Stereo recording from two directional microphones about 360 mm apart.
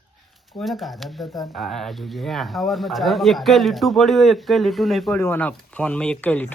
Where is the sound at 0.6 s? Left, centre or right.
Centre.